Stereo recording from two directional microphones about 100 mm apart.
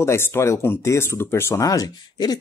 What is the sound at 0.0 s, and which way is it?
Speech, 25° left (ahead or behind).